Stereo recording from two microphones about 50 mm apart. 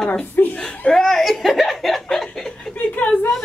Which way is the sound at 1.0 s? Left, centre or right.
Centre.